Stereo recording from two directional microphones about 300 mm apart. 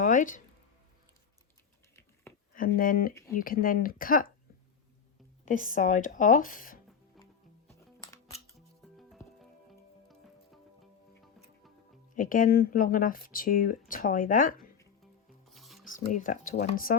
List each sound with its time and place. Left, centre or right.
0.0 s a sound: left
2.6 s speech: left
5.5 s speech: left
8.0 s scissors: centre
8.8 s music: centre
12.1 s speech: left
15.0 s rub: centre
15.9 s speech: left